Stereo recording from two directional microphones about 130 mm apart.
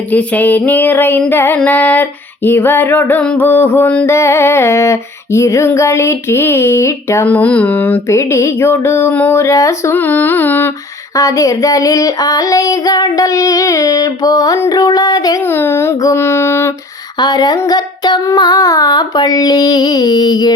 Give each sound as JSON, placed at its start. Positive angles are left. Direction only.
{"t": 0.1, "sound": "female singing", "side_deg": 10}
{"t": 7.3, "sound": "female singing", "side_deg": 10}
{"t": 11.1, "sound": "child singing", "side_deg": 25}
{"t": 15.4, "sound": "child singing", "side_deg": 15}
{"t": 17.2, "sound": "child singing", "side_deg": 30}